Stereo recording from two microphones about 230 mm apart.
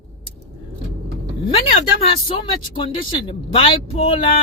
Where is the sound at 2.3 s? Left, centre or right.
Left.